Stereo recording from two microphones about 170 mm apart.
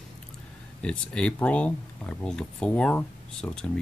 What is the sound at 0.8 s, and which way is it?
Speech, 5° left (ahead or behind).